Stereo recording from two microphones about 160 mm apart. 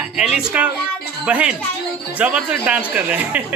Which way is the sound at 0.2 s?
5° right (ahead or behind).